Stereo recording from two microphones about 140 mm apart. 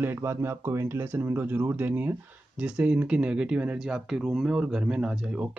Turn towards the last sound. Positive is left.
turn(degrees=-5)  # may be behind; listen again after turning